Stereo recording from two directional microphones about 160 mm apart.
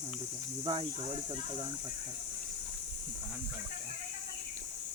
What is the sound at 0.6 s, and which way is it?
Speech, 30° right (ahead or behind).